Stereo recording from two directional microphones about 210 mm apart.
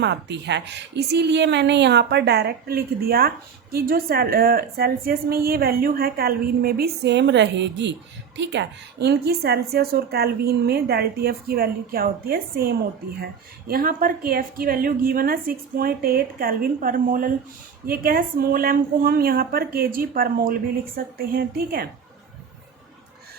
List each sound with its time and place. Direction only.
0.0 s a woman's voice: 55° right (ahead or behind)